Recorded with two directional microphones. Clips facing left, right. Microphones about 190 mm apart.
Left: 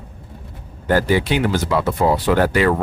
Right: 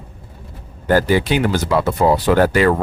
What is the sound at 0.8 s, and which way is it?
Speech, 40° right (ahead or behind).